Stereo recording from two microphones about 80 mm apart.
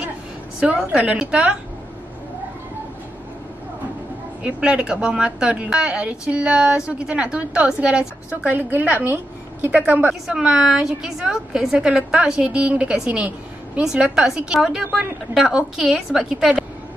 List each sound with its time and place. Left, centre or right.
0.6 s a woman's voice: centre
4.4 s a woman's voice: centre
8.4 s a woman's voice: right
10.2 s a woman's voice: centre